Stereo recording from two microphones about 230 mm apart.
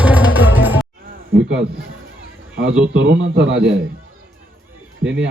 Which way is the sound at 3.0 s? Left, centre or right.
Right.